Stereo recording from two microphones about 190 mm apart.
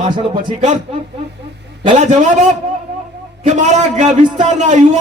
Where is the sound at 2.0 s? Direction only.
40° right (ahead or behind).